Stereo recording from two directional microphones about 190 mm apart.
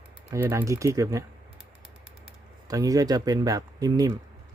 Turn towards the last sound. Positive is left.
turn(degrees=-20)  # may be behind; listen again after turning